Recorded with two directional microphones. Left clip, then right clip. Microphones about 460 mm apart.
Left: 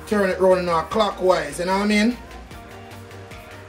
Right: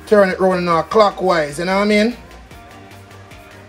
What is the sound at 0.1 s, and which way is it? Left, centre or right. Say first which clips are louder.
Speech: right 5 dB; centre.